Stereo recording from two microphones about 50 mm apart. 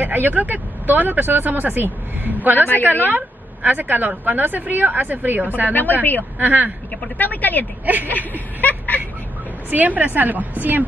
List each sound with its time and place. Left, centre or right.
0.0 s a woman's voice: right
5.7 s speech: left
6.4 s speech: right
7.2 s speech: left
7.8 s speech: right
8.3 s a sound: left
9.7 s speech: right